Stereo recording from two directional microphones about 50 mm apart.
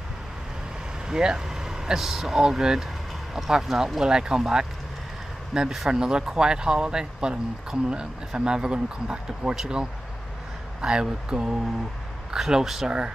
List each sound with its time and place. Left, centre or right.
1.0 s speech: centre
5.5 s speech: centre